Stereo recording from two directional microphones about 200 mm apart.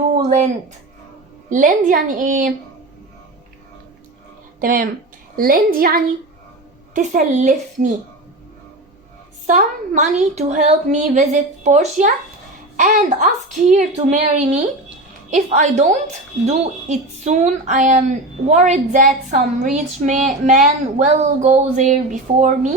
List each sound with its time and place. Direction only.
0.1 s a sound: 35° right (ahead or behind)
1.5 s a woman's voice: 40° right (ahead or behind)
4.6 s a woman's voice: 40° right (ahead or behind)
9.5 s a woman's voice: 35° right (ahead or behind)